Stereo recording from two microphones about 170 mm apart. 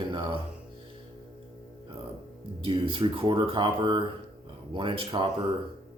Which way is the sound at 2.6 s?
30° right (ahead or behind).